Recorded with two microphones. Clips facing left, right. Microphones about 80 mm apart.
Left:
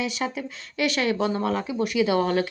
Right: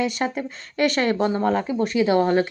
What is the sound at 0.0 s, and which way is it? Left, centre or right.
Speech, right.